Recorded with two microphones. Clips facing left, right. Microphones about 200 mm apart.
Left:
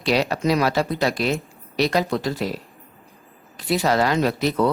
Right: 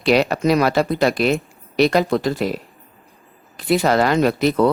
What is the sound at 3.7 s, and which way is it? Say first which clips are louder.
Speech: right 3 dB; 55° right (ahead or behind).